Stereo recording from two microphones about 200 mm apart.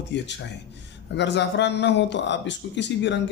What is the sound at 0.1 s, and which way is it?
Speech, 60° left (ahead or behind).